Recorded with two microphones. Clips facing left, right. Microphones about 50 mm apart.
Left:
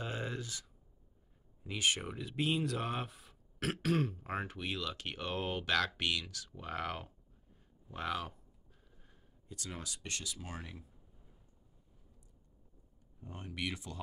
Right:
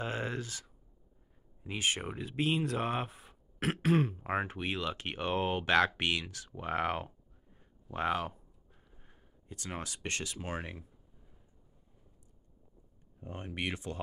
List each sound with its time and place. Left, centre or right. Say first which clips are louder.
0.0 s a sound: right 4 dB; right
1.6 s speech: right 1 dB; right
13.2 s speech: right 3 dB; right